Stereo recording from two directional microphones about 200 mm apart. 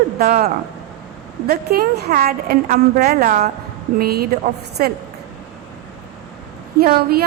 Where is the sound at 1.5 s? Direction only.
45° right (ahead or behind).